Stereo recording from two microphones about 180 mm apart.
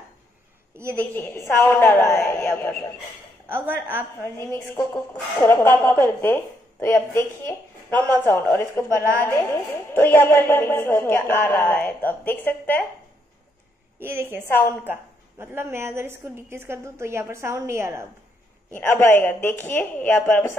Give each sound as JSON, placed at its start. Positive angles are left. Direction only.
{"t": 1.1, "sound": "a woman's voice", "side_deg": 15}
{"t": 3.4, "sound": "a woman's voice", "side_deg": -10}
{"t": 4.2, "sound": "a woman's voice", "side_deg": 15}
{"t": 8.8, "sound": "a woman's voice", "side_deg": -15}
{"t": 9.2, "sound": "a woman's voice", "side_deg": 10}
{"t": 13.9, "sound": "a woman's voice", "side_deg": -10}
{"t": 18.7, "sound": "a woman's voice", "side_deg": 10}